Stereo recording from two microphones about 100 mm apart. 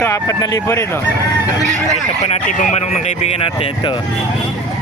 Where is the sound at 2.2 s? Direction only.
90° left.